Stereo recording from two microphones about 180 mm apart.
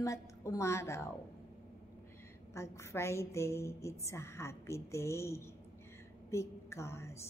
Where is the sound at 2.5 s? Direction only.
15° left (ahead or behind).